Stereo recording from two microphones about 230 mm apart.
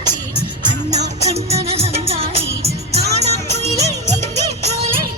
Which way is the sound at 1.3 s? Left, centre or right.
Right.